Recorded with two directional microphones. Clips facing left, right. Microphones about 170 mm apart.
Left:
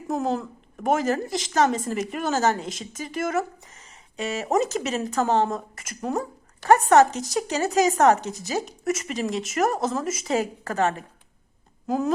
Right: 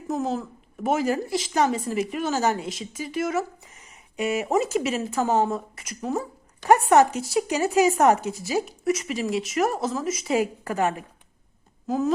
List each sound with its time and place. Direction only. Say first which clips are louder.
0.1 s speech: left 1 dB; centre (ahead or behind)
3.9 s a sound: right 4 dB; 15° right (ahead or behind)
4.9 s speech: left 3 dB; 5° right (ahead or behind)
6.6 s a woman's voice: left 1 dB; 15° right (ahead or behind)
7.1 s speech: right 1 dB; 40° left (ahead or behind)
7.3 s a woman's voice: right 1 dB; 10° right (ahead or behind)
8.3 s speech: right 2 dB; 40° left (ahead or behind)
8.6 s speech: right 2 dB; centre (ahead or behind)
10.3 s a woman's voice: right 1 dB; 10° right (ahead or behind)
11.9 s speech: even; centre (ahead or behind)